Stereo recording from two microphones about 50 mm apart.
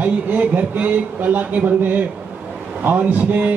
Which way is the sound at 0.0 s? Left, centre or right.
Right.